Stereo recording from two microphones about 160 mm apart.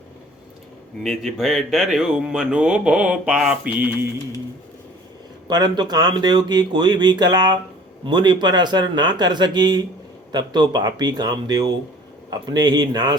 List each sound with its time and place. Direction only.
1.0 s speech: centre (ahead or behind)
5.5 s speech: 25° right (ahead or behind)